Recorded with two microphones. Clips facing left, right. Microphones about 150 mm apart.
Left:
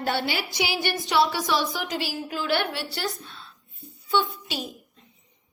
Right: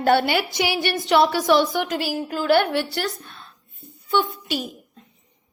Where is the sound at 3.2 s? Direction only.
50° right (ahead or behind).